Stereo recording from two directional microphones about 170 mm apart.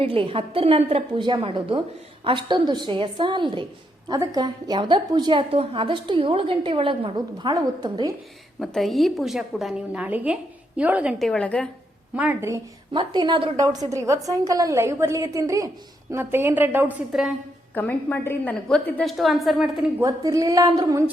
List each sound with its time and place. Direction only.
0.0 s a woman's voice: 30° right (ahead or behind)
8.5 s a woman's voice: centre (ahead or behind)
11.3 s a woman's voice: 5° left (ahead or behind)
12.1 s a woman's voice: 10° right (ahead or behind)
12.9 s a woman's voice: 25° right (ahead or behind)
17.7 s a woman's voice: 10° left (ahead or behind)
20.0 s a woman's voice: 20° right (ahead or behind)